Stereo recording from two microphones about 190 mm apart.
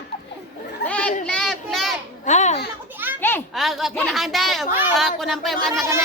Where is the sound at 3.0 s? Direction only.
10° right (ahead or behind).